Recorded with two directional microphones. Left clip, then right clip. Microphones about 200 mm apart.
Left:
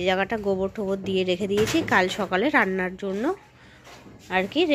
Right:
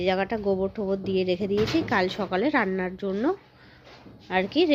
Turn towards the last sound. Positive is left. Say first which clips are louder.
# even
turn(degrees=-10)  # may be behind; listen again after turning